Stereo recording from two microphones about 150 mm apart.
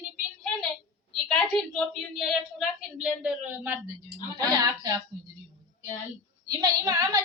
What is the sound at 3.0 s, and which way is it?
Speech, 10° right (ahead or behind).